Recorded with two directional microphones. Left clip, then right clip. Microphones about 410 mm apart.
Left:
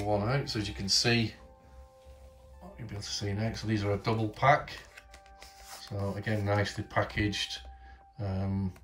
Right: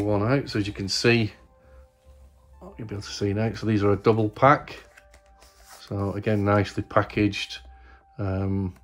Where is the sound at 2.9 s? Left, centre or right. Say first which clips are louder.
Right 8 dB; centre.